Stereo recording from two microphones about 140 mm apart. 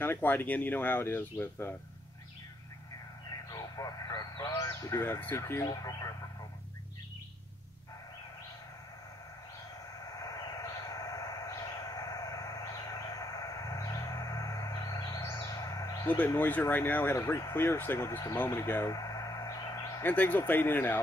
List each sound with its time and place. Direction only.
0.0 s speech: 15° left (ahead or behind)
3.5 s speech: 25° left (ahead or behind)
10.1 s a sound: 25° left (ahead or behind)
16.3 s speech: 15° left (ahead or behind)
18.5 s a sound: 20° left (ahead or behind)
20.0 s speech: 15° left (ahead or behind)